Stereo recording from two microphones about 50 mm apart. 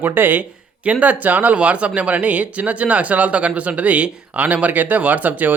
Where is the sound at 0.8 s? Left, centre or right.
Right.